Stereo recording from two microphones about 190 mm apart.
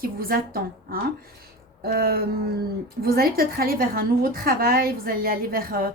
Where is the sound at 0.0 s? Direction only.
50° right (ahead or behind).